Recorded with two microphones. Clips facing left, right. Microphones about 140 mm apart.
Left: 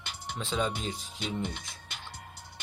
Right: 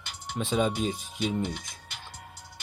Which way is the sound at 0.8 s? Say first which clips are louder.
Right 7 dB; 60° right (ahead or behind).